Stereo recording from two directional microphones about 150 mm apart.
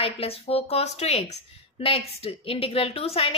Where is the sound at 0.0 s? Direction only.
40° left (ahead or behind).